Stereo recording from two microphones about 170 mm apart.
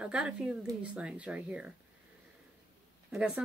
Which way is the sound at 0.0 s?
5° right (ahead or behind).